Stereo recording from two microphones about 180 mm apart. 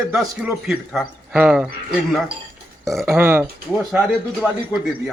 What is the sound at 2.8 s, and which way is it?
Speech, centre (ahead or behind).